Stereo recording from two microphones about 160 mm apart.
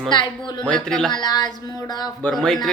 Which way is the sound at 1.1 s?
25° left (ahead or behind).